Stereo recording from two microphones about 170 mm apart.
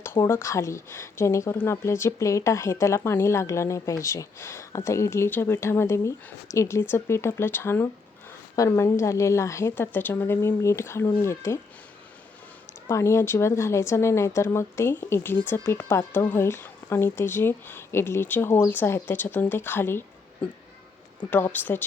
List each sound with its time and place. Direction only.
0.0 s speech: 15° left (ahead or behind)
12.9 s speech: 15° left (ahead or behind)
21.2 s speech: 10° left (ahead or behind)